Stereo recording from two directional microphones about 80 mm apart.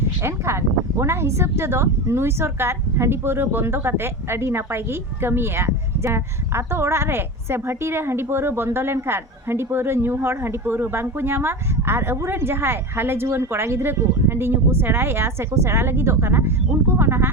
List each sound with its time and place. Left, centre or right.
0.2 s speech: right